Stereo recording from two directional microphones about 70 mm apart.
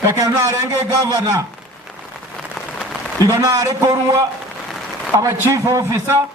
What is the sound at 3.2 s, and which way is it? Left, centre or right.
A man's voice, right.